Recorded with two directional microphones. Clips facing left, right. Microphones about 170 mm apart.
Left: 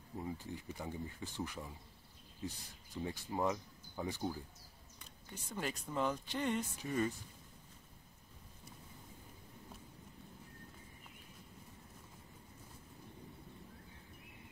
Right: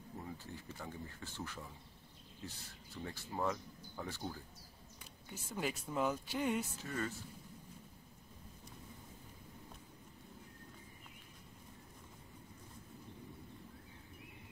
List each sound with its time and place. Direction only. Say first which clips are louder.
0.2 s speech: left 6 dB; 15° left (ahead or behind)
5.3 s speech: right 1 dB; 5° right (ahead or behind)
6.8 s speech: left 5 dB; 15° left (ahead or behind)